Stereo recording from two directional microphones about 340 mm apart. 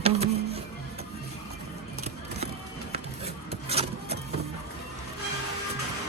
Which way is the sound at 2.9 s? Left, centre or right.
Centre.